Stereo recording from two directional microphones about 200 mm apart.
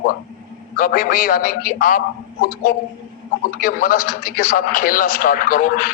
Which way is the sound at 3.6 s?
45° left (ahead or behind).